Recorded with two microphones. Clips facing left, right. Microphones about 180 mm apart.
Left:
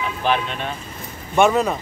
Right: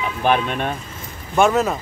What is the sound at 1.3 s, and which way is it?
Speech, centre (ahead or behind).